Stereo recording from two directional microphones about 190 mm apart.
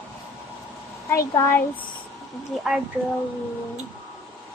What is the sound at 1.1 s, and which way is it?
Speech, 15° left (ahead or behind).